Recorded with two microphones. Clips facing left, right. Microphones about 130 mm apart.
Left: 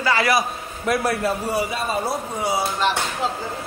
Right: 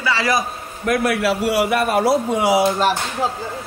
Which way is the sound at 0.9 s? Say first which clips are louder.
Right 3 dB; 70° right (ahead or behind).